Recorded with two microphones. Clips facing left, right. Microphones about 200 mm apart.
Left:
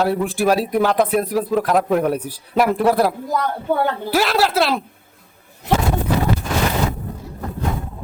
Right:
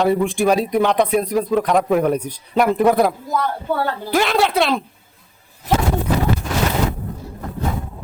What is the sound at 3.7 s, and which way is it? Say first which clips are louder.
Speech: left 2 dB; 20° left (ahead or behind).